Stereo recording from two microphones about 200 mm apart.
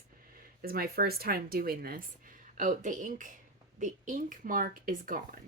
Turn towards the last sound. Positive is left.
turn(degrees=-45)  # may be behind; listen again after turning